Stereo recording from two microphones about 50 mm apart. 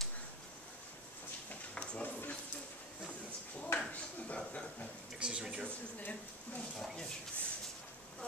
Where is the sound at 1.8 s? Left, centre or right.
Left.